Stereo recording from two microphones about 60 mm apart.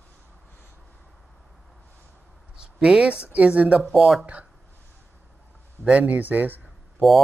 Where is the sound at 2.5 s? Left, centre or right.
Centre.